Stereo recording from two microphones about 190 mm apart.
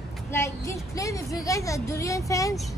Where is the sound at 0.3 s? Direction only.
15° left (ahead or behind).